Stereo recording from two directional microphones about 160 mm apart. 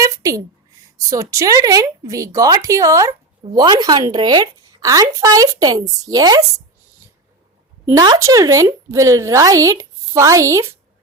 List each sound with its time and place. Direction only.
0.0 s a sound: 20° right (ahead or behind)
1.1 s speech: 20° right (ahead or behind)
7.9 s speech: 20° right (ahead or behind)